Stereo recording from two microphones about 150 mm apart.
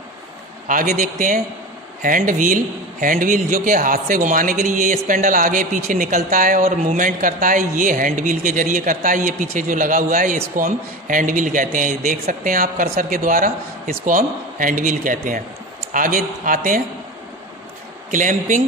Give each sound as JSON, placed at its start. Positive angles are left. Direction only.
{"t": 0.7, "sound": "speech", "side_deg": -65}
{"t": 18.1, "sound": "speech", "side_deg": -60}